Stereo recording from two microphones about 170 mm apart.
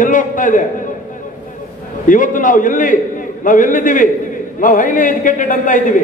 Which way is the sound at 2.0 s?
50° left (ahead or behind).